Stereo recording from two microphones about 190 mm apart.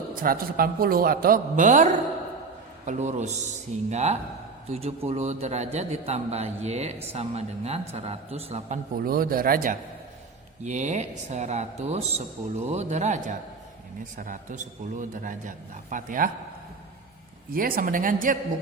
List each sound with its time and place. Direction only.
0.2 s a man's voice: 50° right (ahead or behind); by 8.8 s 30° right (ahead or behind)
9.0 s a man's voice: 50° right (ahead or behind)
17.5 s a man's voice: 50° right (ahead or behind)